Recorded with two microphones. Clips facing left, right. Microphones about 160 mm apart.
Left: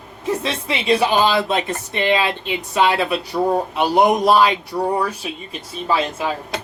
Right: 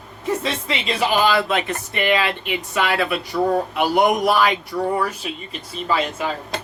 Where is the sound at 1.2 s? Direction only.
30° left (ahead or behind).